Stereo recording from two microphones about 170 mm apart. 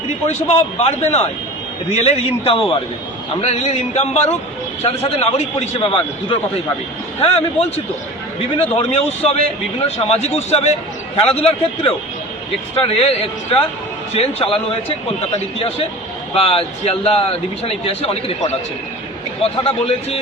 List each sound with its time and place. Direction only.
0.3 s speech: 40° left (ahead or behind)